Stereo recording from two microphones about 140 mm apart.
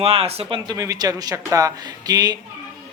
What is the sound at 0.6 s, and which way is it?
Speech, 25° right (ahead or behind).